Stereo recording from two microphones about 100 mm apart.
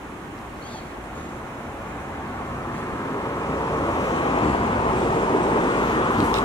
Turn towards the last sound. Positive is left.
turn(degrees=45)  # may be behind; listen again after turning